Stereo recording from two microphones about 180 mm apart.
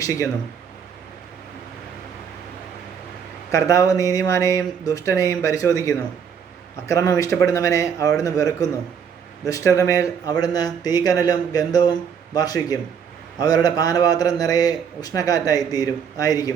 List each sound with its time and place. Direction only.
3.5 s a man's voice: 15° left (ahead or behind)